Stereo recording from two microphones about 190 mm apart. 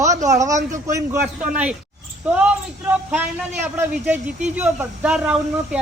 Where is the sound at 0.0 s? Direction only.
15° right (ahead or behind).